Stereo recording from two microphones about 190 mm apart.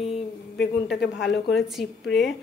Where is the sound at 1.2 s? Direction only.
Centre (ahead or behind).